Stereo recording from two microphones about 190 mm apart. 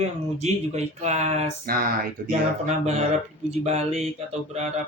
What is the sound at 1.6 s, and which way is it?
Speech, 50° right (ahead or behind).